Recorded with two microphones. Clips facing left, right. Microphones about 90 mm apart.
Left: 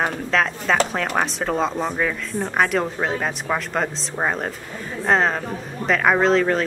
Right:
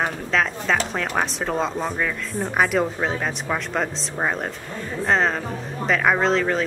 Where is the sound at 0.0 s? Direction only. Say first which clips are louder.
Left 1 dB; centre (ahead or behind).